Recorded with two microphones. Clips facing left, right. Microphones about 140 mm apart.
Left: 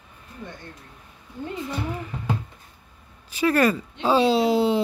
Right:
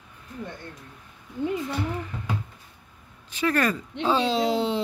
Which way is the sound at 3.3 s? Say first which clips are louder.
Left 4 dB; 10° left (ahead or behind).